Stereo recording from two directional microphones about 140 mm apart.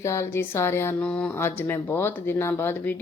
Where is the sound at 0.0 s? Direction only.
20° left (ahead or behind).